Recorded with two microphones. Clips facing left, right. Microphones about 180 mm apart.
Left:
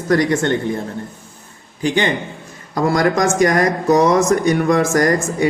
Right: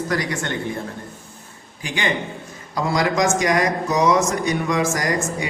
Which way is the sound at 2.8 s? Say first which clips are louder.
Left 4 dB; 50° left (ahead or behind).